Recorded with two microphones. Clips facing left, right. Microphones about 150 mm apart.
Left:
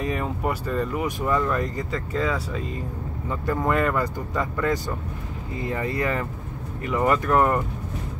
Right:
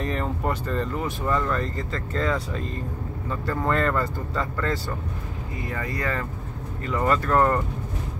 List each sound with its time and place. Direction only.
0.0 s speech: 10° left (ahead or behind)